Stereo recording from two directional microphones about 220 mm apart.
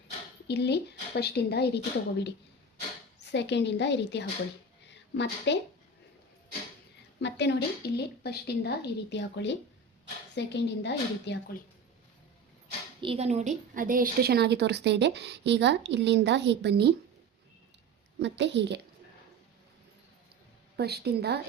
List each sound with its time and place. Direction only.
0.4 s a woman's voice: 50° left (ahead or behind)
7.2 s a woman's voice: 50° left (ahead or behind)
13.0 s a woman's voice: 25° right (ahead or behind); by 16.9 s 50° right (ahead or behind)
18.2 s a woman's voice: 55° right (ahead or behind)
20.7 s a woman's voice: 45° right (ahead or behind)